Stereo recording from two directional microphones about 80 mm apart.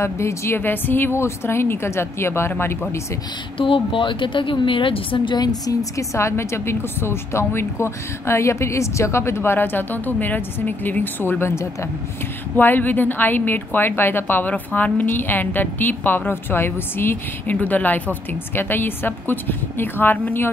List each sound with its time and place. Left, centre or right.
0.0 s a woman's voice: left
3.5 s a woman's voice: left
5.9 s a woman's voice: left